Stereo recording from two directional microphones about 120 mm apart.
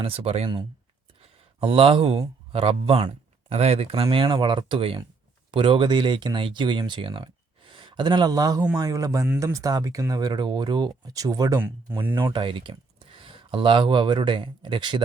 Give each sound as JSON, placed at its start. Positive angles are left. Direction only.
{"t": 0.0, "sound": "speech", "side_deg": -50}
{"t": 0.4, "sound": "speech", "side_deg": -40}
{"t": 12.3, "sound": "speech", "side_deg": -45}